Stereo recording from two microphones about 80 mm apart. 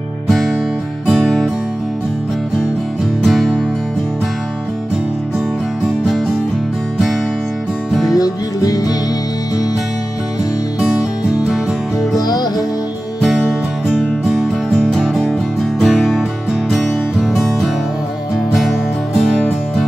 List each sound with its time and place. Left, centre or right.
0.3 s music: centre
3.3 s music: centre
8.1 s music: left
10.8 s music: centre
12.2 s music: left
13.8 s music: centre